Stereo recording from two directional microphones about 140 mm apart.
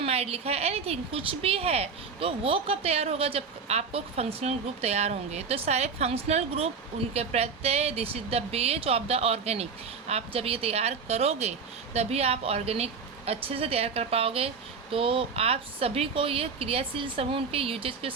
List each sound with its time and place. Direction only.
0.0 s a woman's voice: 45° right (ahead or behind)